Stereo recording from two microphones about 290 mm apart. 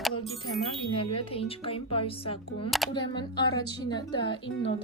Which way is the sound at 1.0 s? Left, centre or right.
Centre.